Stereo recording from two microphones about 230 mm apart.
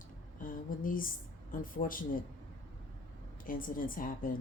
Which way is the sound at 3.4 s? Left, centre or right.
Left.